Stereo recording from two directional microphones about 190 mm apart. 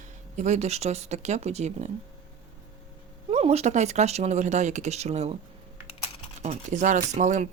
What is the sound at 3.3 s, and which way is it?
Speech, 35° right (ahead or behind).